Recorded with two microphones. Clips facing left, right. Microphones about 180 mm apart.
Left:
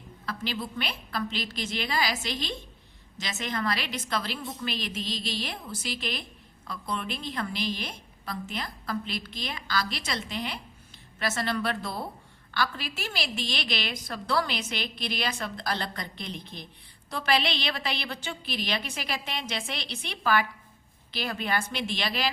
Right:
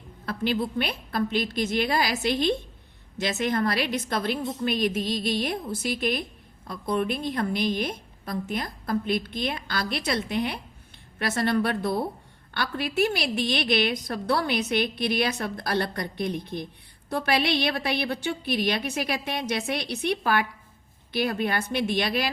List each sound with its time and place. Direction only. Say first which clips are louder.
0.3 s a woman's voice: right 7 dB; 55° right (ahead or behind)